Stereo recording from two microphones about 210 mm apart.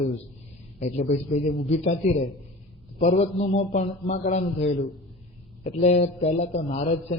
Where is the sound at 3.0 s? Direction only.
30° left (ahead or behind).